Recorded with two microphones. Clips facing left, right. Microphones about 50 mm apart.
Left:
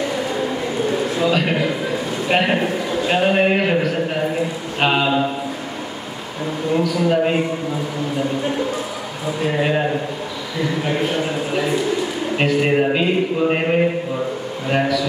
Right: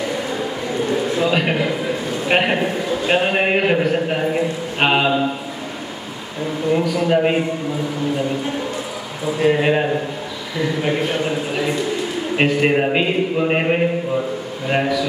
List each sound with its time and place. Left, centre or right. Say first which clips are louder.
1.2 s a man's voice: left 2 dB; centre
6.7 s a man's voice: right 1 dB; right
9.4 s a man's voice: right 3 dB; centre
12.4 s a man's voice: right 1 dB; centre